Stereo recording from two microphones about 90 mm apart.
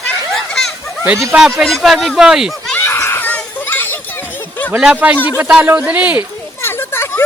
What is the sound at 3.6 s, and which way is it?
Children playing, 20° left (ahead or behind).